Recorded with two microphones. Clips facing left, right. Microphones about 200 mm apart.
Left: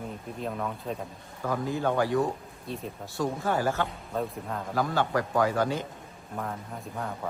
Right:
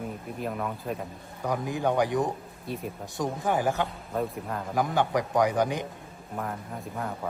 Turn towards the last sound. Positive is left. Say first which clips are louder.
# right 1 dB
turn(degrees=0)  # may be behind; listen again after turning